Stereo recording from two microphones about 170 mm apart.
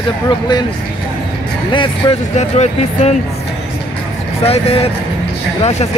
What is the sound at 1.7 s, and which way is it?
Speech, 30° left (ahead or behind).